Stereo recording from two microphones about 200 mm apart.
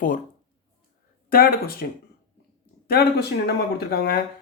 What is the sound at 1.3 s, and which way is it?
Speech, 50° left (ahead or behind).